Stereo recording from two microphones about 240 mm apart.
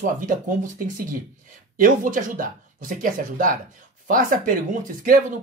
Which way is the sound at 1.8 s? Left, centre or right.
Right.